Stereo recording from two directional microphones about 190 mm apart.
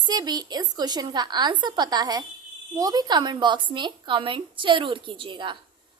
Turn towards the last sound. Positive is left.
turn(degrees=-25)  # may be behind; listen again after turning